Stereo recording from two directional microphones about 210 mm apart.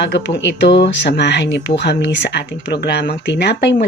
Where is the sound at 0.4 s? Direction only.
55° left (ahead or behind).